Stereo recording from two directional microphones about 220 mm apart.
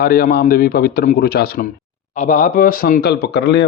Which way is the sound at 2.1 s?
35° left (ahead or behind).